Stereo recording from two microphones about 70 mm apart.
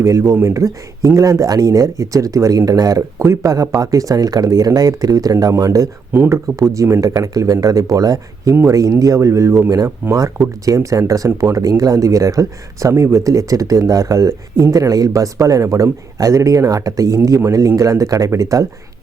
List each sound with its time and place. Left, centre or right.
0.0 s speech: right
3.2 s speech: right
6.1 s speech: right
9.6 s speech: right